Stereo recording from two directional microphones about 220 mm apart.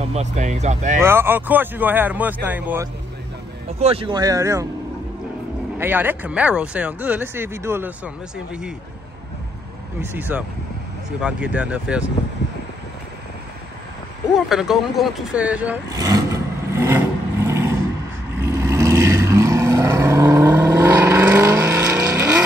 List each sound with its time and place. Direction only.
0.0 s speech: 30° right (ahead or behind)
1.0 s speech: 10° right (ahead or behind)
3.8 s speech: 25° right (ahead or behind)
5.8 s speech: 10° right (ahead or behind)
10.1 s speech: 10° right (ahead or behind)
14.5 s speech: centre (ahead or behind)
15.9 s speech: 15° right (ahead or behind)
16.8 s vehicle: 10° right (ahead or behind)